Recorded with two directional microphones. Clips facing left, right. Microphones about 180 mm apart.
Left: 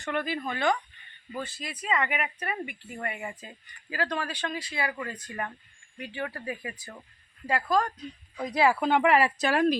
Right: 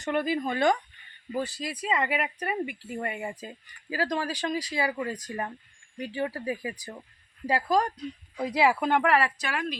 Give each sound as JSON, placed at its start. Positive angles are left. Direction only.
{"t": 0.0, "sound": "speech", "side_deg": -15}
{"t": 0.4, "sound": "speech", "side_deg": -35}
{"t": 8.7, "sound": "speech", "side_deg": -5}
{"t": 9.4, "sound": "speech", "side_deg": 40}